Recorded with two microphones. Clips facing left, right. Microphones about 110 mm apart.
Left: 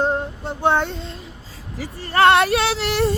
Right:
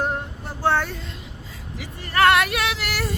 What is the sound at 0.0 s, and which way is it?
Female singing, 25° left (ahead or behind).